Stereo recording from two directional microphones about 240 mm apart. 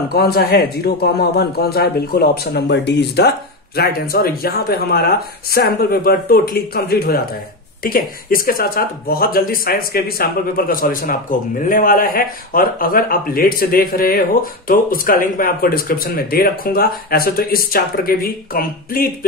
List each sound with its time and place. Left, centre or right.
0.1 s speech: left